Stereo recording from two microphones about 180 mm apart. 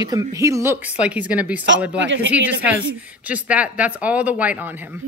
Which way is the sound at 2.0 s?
90° right.